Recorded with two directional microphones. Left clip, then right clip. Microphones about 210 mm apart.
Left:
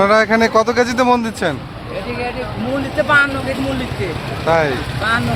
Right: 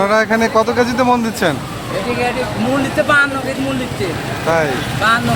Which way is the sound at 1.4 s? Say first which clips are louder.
Right 3 dB; 5° left (ahead or behind).